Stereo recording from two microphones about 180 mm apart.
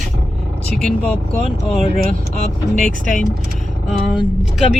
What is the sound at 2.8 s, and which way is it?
Speech, 45° left (ahead or behind).